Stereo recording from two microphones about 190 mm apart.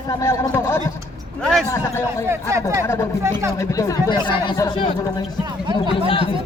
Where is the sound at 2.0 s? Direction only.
15° right (ahead or behind).